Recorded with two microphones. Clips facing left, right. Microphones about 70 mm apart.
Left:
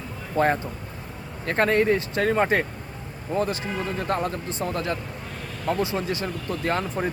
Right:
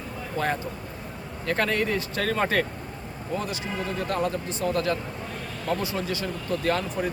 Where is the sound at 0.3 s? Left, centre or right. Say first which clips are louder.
Left 6 dB; left.